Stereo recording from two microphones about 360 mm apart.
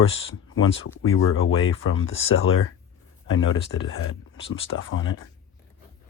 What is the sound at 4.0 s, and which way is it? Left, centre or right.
Speech, left.